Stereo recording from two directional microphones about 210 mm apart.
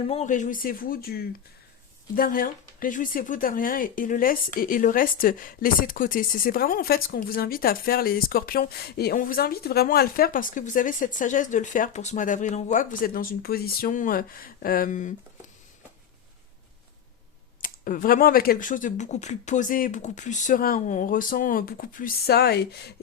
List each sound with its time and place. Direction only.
0.1 s speech: 35° left (ahead or behind)
17.6 s speech: 40° left (ahead or behind)